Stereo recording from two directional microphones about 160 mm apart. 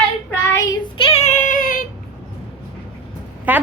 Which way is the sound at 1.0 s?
40° left (ahead or behind).